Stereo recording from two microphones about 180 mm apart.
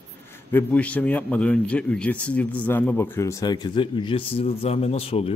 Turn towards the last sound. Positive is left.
turn(degrees=35)  # may be behind; listen again after turning